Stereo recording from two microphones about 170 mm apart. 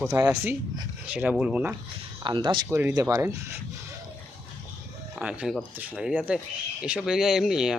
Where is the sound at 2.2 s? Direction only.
30° right (ahead or behind).